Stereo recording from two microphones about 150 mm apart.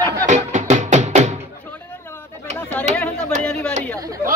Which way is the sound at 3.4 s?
10° left (ahead or behind).